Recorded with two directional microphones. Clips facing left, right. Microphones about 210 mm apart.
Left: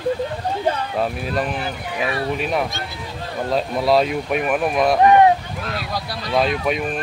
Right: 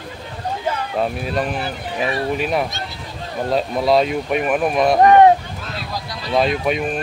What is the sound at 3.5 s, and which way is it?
Speech, centre (ahead or behind).